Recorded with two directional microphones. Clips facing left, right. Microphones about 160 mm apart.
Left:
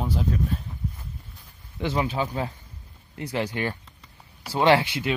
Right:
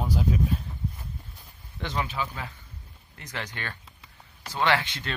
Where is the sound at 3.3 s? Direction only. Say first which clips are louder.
Left 9 dB; 10° left (ahead or behind).